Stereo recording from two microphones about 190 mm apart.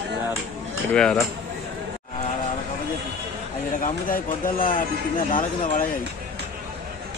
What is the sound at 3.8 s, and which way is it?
Speech, 45° left (ahead or behind).